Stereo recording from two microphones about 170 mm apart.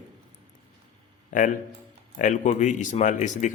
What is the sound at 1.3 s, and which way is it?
A man's voice, 50° left (ahead or behind).